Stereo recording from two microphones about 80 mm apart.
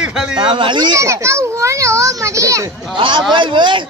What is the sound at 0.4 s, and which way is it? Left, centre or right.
Speech, right.